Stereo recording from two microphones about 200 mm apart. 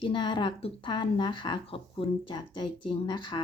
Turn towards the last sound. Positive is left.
turn(degrees=20)  # may be behind; listen again after turning